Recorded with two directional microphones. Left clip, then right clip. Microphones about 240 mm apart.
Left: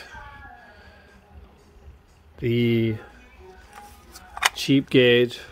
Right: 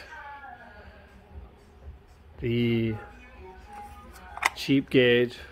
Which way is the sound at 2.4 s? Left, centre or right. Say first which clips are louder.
Left 5 dB; left.